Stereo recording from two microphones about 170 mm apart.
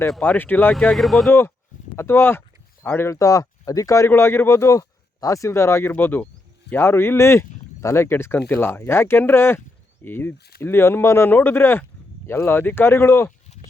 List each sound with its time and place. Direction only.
0.2 s speech: 10° left (ahead or behind)
1.3 s speech: 15° left (ahead or behind)